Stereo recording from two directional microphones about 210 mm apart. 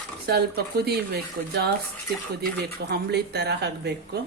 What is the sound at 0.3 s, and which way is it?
Speech, 50° right (ahead or behind).